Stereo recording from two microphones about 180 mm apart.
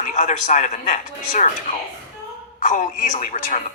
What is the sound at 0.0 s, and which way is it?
Speech, 45° left (ahead or behind).